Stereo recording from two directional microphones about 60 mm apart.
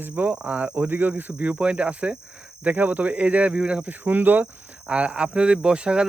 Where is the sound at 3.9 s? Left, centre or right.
Right.